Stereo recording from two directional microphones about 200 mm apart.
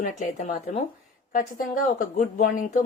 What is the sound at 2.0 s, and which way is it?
Speech, 35° left (ahead or behind).